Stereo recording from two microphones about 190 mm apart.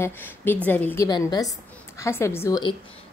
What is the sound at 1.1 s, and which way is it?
A woman's voice, 20° left (ahead or behind).